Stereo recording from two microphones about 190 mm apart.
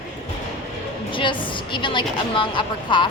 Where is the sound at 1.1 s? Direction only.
25° left (ahead or behind).